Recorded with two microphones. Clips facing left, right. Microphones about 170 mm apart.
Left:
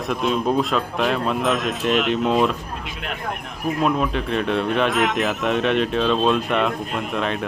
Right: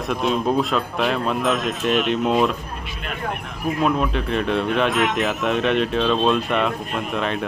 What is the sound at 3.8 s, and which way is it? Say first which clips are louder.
Speech: even; centre (ahead or behind).